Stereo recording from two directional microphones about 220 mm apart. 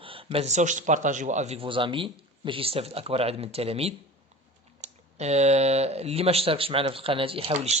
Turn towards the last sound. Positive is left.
turn(degrees=-30)  # may be behind; listen again after turning